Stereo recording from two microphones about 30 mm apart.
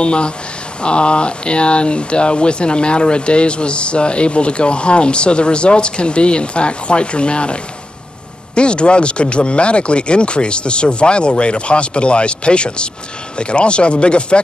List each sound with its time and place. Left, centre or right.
0.0 s speech: left